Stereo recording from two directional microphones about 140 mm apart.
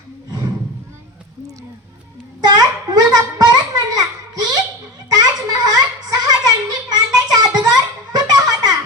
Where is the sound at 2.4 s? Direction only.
30° right (ahead or behind).